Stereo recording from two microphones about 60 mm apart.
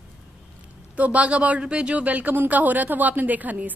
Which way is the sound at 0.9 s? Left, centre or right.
Right.